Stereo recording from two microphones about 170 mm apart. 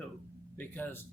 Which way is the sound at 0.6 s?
10° left (ahead or behind).